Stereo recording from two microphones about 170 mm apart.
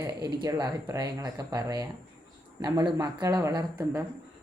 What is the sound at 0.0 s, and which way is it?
Speech, 25° right (ahead or behind).